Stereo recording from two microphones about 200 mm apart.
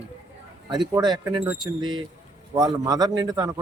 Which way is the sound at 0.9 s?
20° right (ahead or behind).